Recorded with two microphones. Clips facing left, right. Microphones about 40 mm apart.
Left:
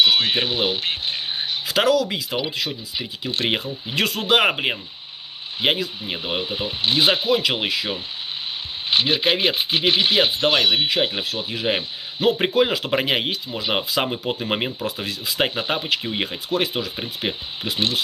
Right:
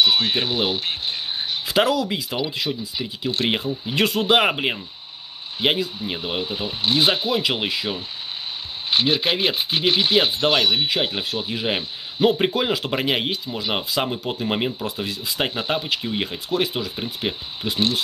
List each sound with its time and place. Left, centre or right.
0.0 s speech: left
1.8 s speech: centre
2.3 s speech: centre
3.9 s speech: centre
7.2 s speech: centre
8.9 s speech: centre
13.7 s speech: centre
15.3 s speech: centre